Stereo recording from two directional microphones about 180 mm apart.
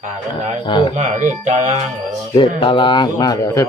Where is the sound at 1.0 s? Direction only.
40° right (ahead or behind).